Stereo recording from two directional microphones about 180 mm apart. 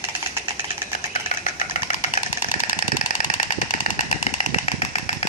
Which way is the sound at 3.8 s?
40° left (ahead or behind).